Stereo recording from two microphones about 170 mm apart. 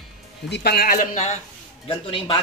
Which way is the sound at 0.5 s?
65° left (ahead or behind).